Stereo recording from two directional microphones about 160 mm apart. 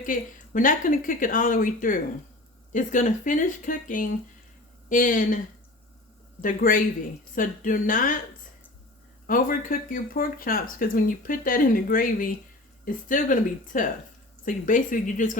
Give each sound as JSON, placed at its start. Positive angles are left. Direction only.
{"t": 0.0, "sound": "speech", "side_deg": 55}
{"t": 6.4, "sound": "speech", "side_deg": 60}
{"t": 9.2, "sound": "speech", "side_deg": 60}